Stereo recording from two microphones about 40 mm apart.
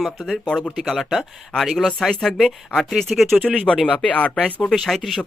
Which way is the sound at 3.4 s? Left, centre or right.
Left.